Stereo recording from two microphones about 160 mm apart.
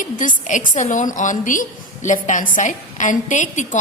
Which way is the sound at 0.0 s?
55° left (ahead or behind).